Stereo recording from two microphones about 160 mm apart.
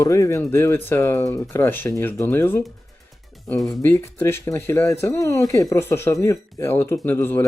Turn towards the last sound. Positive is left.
turn(degrees=15)  # may be behind; listen again after turning